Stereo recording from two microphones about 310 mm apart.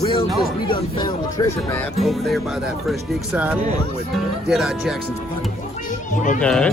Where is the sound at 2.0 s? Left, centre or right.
Centre.